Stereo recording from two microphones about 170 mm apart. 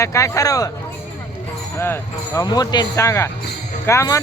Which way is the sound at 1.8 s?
15° left (ahead or behind).